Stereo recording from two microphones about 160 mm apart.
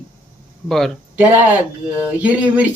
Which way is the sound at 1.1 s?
10° right (ahead or behind).